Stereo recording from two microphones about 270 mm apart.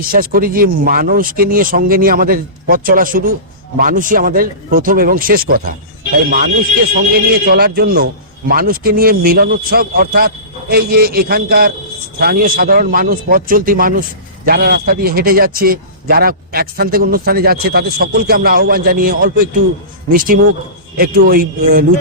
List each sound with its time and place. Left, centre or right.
0.0 s a man's voice: right
7.1 s a man's voice: right